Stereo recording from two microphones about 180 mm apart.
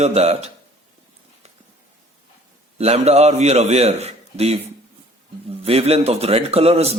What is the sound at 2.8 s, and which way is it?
Speech, 35° right (ahead or behind).